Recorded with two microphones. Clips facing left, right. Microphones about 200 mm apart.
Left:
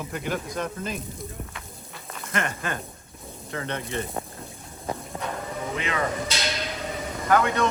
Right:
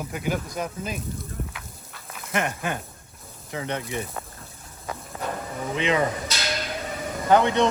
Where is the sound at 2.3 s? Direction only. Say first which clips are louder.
Right 2 dB; 10° right (ahead or behind).